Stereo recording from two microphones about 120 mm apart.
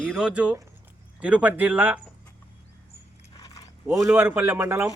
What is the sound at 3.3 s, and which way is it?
Mechanisms, 30° left (ahead or behind).